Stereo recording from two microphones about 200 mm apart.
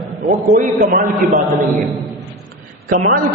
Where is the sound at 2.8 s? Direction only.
45° right (ahead or behind).